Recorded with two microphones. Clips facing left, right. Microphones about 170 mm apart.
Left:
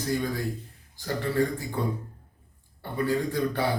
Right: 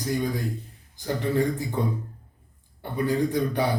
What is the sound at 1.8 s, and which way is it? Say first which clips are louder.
Speech: right 2 dB; 20° right (ahead or behind).